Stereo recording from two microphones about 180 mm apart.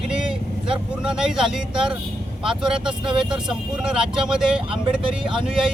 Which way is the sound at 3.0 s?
25° right (ahead or behind).